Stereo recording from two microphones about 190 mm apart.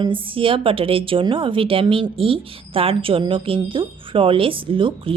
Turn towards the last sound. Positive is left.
turn(degrees=-25)  # may be behind; listen again after turning